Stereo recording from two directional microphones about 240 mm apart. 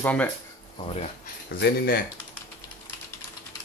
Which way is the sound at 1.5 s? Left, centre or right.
Left.